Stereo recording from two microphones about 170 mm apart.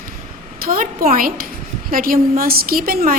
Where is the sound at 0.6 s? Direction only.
55° right (ahead or behind).